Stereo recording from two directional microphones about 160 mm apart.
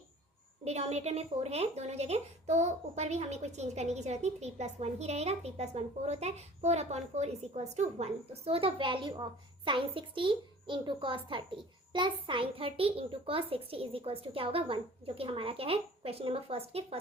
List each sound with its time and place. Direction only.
0.6 s a woman's voice: 40° right (ahead or behind)